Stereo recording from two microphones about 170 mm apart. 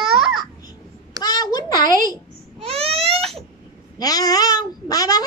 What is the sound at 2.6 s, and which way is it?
Baby cry, 35° right (ahead or behind).